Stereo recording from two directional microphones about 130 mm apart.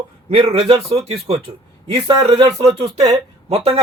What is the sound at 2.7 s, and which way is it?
Speech, 35° right (ahead or behind).